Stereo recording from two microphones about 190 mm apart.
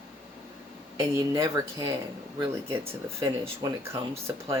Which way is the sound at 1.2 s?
15° right (ahead or behind).